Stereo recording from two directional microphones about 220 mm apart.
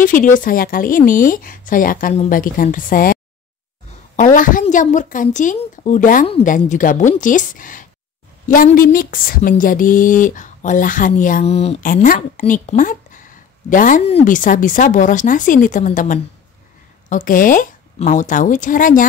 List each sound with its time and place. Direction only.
0.0 s speech: 35° left (ahead or behind)
4.2 s speech: 35° left (ahead or behind)